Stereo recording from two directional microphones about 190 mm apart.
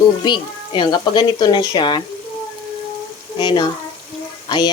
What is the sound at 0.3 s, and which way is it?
Speech, 25° left (ahead or behind).